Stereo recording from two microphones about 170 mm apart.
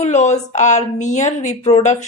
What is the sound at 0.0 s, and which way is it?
A woman's voice, 40° left (ahead or behind).